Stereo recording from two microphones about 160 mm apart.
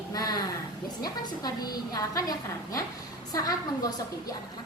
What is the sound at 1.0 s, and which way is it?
A woman's voice, 25° left (ahead or behind).